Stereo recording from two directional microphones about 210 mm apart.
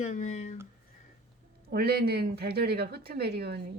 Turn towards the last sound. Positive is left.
turn(degrees=-50)  # may be behind; listen again after turning